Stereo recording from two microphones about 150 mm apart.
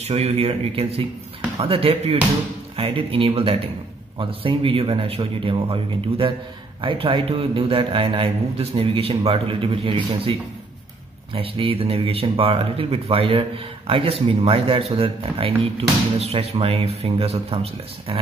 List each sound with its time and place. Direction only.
0.0 s speech: 45° right (ahead or behind)
11.3 s speech: 35° right (ahead or behind)